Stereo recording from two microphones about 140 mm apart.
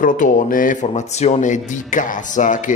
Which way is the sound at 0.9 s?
55° left (ahead or behind).